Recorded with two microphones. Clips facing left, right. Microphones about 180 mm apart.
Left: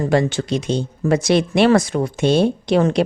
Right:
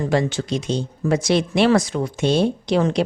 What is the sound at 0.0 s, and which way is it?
A woman's voice, 55° left (ahead or behind).